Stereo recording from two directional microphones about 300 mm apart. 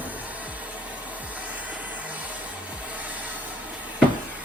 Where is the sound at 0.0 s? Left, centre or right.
Centre.